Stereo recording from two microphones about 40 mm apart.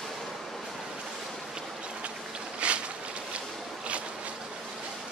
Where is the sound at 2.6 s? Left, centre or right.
Right.